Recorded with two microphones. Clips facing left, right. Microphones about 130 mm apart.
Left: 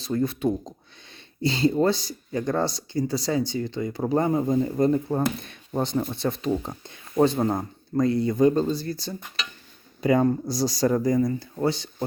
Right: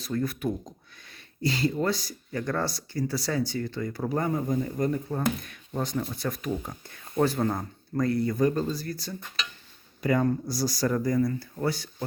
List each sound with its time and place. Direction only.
0.0 s speech: 25° left (ahead or behind)